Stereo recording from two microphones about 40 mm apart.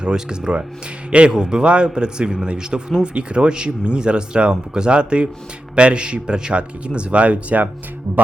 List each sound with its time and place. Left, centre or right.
0.0 s speech: right